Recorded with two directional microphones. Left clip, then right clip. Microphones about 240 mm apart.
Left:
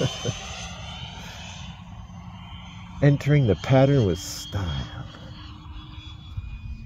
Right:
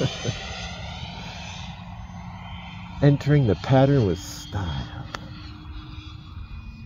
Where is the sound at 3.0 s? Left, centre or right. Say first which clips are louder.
Right 1 dB; left.